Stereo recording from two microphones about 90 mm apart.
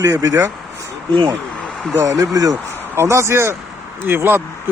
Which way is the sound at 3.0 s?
30° right (ahead or behind).